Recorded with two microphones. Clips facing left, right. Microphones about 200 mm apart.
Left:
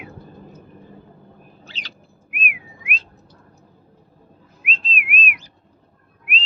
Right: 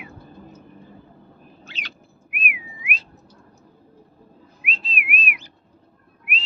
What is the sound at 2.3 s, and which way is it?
Whistling, 5° right (ahead or behind).